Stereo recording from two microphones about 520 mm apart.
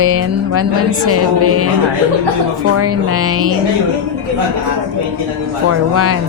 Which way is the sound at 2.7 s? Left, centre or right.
Right.